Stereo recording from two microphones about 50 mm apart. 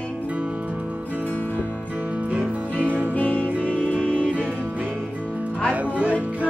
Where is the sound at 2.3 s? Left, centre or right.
Right.